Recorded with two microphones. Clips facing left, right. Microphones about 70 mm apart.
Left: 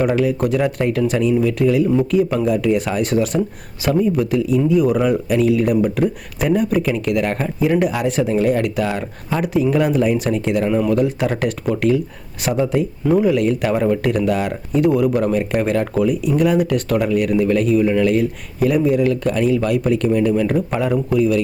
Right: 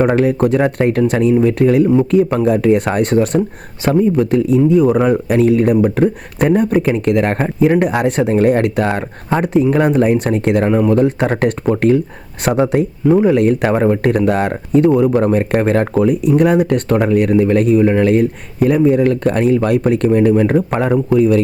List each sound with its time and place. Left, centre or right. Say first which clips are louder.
0.1 s speech: right 4 dB; right
10.4 s speech: right 5 dB; right
10.7 s speech: right 4 dB; right
12.4 s speech: right 4 dB; right
13.1 s speech: right 4 dB; right
13.3 s speech: right 4 dB; right
20.7 s speech: right 3 dB; right
20.9 s speech: right 5 dB; right